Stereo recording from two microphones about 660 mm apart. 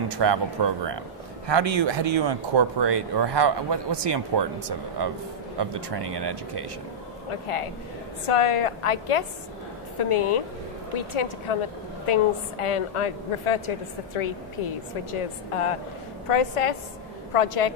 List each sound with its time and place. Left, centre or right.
0.2 s speech: right
7.2 s a woman's voice: left